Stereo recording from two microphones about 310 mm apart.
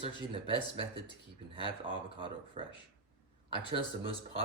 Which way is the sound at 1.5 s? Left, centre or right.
Centre.